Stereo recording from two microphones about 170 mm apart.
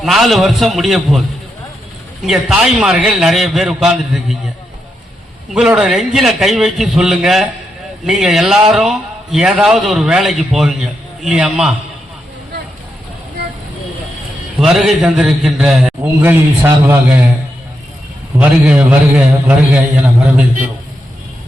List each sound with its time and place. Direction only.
0.0 s a man's voice: centre (ahead or behind)
2.2 s a man's voice: 5° right (ahead or behind)
5.5 s a man's voice: 5° right (ahead or behind)
14.6 s a man's voice: centre (ahead or behind)
18.3 s a man's voice: 5° right (ahead or behind)